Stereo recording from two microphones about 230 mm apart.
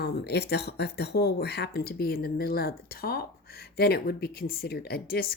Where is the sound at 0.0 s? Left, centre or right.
Left.